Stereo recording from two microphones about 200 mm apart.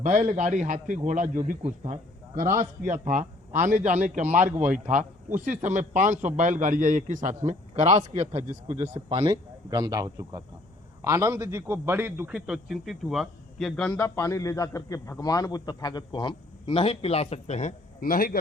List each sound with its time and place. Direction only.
0.0 s a man's voice: 40° right (ahead or behind); by 18.3 s 45° left (ahead or behind)